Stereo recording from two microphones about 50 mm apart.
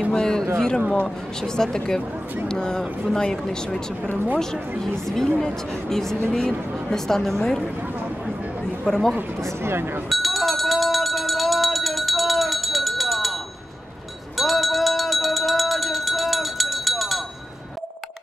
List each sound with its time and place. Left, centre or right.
0.1 s speech: centre
8.8 s speech: centre
9.4 s speech: right
10.0 s a sound: centre
14.3 s music: centre